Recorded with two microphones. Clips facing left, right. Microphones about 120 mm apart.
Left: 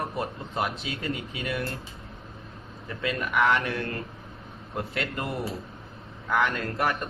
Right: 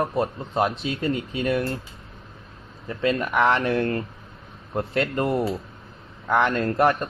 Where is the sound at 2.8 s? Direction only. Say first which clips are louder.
Right 7 dB; 35° right (ahead or behind).